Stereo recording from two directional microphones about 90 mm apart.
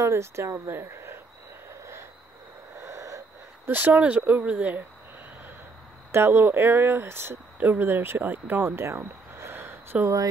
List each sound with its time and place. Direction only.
0.0 s speech: 30° right (ahead or behind)
1.7 s owl: 30° right (ahead or behind)
3.6 s speech: 20° right (ahead or behind)
6.1 s speech: 25° right (ahead or behind)